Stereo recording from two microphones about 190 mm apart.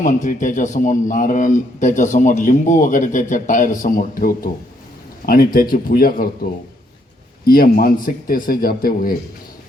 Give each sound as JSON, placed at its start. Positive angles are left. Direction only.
{"t": 0.0, "sound": "a man's voice", "side_deg": 40}
{"t": 7.4, "sound": "a man's voice", "side_deg": 50}